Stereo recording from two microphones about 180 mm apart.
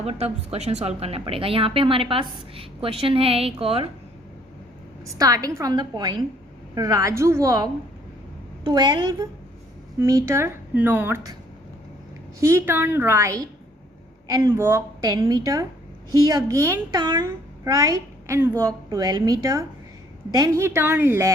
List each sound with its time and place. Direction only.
0.0 s speech: 35° right (ahead or behind)
5.0 s a woman's voice: 20° right (ahead or behind)
12.4 s a woman's voice: 15° right (ahead or behind)